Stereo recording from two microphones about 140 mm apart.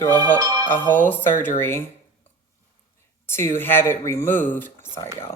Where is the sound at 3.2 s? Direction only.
15° left (ahead or behind).